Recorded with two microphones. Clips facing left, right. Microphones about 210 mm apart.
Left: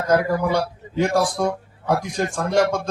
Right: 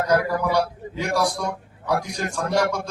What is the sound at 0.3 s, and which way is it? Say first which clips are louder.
A man's voice: left 1 dB; 50° left (ahead or behind).